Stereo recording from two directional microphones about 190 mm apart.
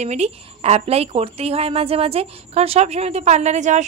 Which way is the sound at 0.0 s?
35° right (ahead or behind).